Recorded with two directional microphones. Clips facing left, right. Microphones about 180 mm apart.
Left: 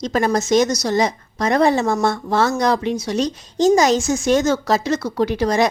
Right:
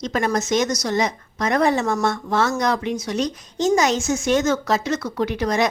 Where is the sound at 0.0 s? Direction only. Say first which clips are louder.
Left 3 dB; 35° left (ahead or behind).